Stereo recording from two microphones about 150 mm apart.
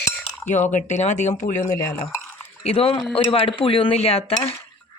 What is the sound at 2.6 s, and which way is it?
Speech, 40° left (ahead or behind).